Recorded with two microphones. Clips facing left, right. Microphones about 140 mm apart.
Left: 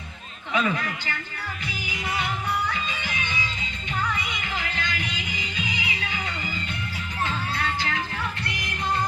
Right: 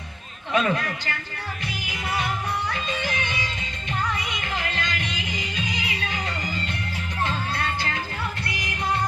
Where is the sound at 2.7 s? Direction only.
50° right (ahead or behind).